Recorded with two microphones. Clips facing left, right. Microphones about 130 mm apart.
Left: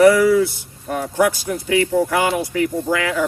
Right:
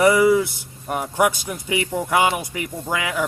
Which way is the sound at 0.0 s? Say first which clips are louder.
Left 3 dB; 20° right (ahead or behind).